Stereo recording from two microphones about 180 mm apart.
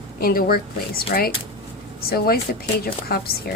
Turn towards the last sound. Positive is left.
turn(degrees=60)  # may be behind; listen again after turning